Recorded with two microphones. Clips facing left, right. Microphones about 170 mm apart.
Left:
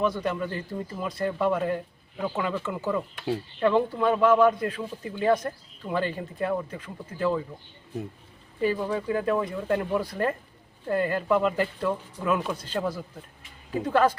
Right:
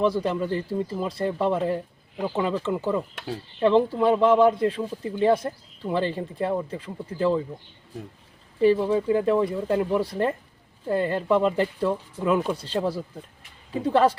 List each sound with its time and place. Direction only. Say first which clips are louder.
0.0 s speech: right 3 dB; 30° right (ahead or behind)
8.6 s speech: right 6 dB; 25° right (ahead or behind)